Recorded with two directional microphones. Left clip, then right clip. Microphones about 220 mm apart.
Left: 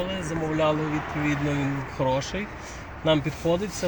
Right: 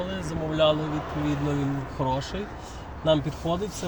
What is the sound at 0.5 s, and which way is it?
Speech, 30° right (ahead or behind).